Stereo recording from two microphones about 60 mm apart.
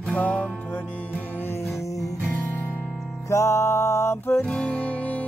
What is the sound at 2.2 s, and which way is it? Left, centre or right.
Music, left.